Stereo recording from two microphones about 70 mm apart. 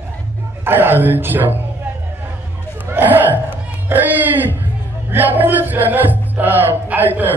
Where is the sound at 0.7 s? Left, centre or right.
Right.